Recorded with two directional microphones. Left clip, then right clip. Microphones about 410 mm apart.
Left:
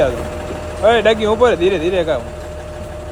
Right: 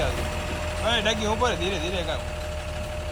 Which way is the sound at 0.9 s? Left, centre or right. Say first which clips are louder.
Left 12 dB; left.